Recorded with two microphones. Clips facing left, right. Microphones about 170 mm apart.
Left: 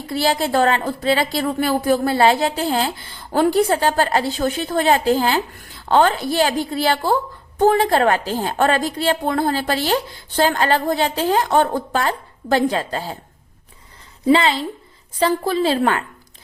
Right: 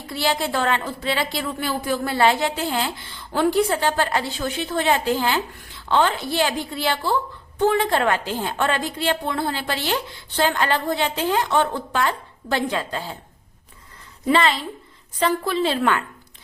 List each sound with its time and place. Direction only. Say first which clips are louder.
0.1 s a woman's voice: left 4 dB; 35° left (ahead or behind)
15.2 s a woman's voice: left 3 dB; 35° left (ahead or behind)